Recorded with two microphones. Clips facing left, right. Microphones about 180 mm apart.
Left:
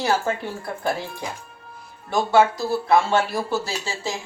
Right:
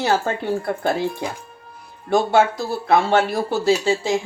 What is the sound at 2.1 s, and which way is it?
Speech, 55° right (ahead or behind).